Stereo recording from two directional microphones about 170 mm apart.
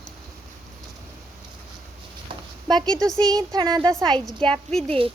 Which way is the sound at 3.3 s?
20° right (ahead or behind).